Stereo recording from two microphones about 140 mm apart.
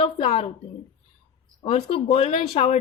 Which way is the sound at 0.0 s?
45° left (ahead or behind).